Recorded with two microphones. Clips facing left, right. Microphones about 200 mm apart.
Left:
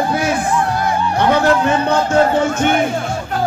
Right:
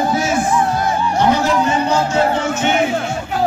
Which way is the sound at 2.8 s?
5° right (ahead or behind).